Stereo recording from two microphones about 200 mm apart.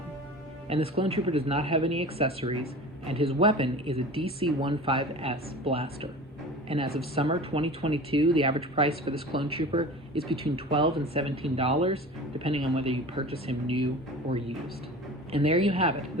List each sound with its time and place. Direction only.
0.9 s speech: 30° right (ahead or behind)